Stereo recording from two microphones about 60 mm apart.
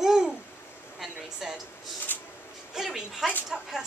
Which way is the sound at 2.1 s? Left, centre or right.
Left.